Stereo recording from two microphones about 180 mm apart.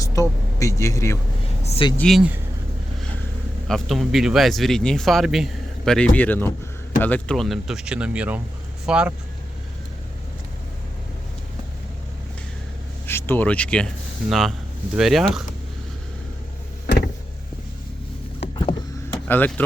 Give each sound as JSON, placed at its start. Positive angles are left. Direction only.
{"t": 0.0, "sound": "vehicle", "side_deg": 15}
{"t": 1.6, "sound": "speech", "side_deg": 30}
{"t": 2.0, "sound": "speech", "side_deg": 0}
{"t": 3.7, "sound": "speech", "side_deg": 0}
{"t": 13.1, "sound": "speech", "side_deg": 10}
{"t": 18.5, "sound": "a sound", "side_deg": 25}
{"t": 19.3, "sound": "speech", "side_deg": 10}